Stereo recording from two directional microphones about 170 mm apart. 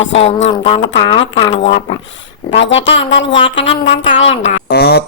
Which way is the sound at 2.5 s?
90° left.